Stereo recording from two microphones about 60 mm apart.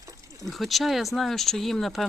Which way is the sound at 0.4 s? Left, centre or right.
Centre.